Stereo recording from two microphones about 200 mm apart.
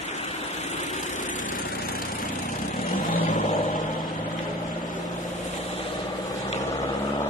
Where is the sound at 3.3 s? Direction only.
40° left (ahead or behind).